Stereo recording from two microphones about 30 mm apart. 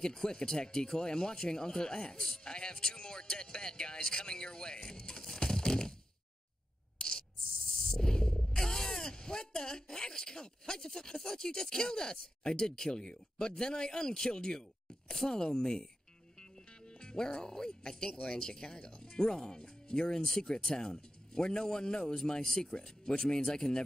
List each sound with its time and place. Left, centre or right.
0.0 s speech: left
2.1 s speech: centre
2.4 s speech: left
7.0 s a sound: left
13.5 s speech: left
16.3 s music: left
18.3 s speech: left